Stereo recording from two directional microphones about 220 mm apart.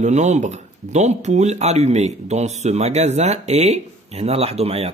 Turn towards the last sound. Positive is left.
turn(degrees=-30)  # may be behind; listen again after turning